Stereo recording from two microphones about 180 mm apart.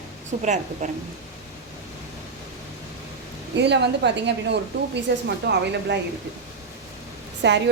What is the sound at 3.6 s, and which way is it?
A woman's voice, 70° right (ahead or behind).